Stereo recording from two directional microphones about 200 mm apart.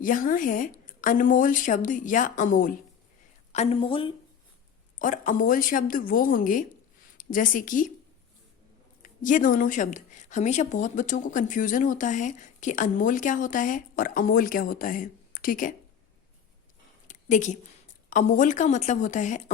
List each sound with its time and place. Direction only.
0.0 s a woman's voice: 40° left (ahead or behind)
3.5 s a woman's voice: 30° left (ahead or behind)
4.9 s a woman's voice: 40° left (ahead or behind)
9.0 s a woman's voice: 40° left (ahead or behind)
17.1 s a sound: 40° left (ahead or behind)
18.1 s a woman's voice: 40° left (ahead or behind)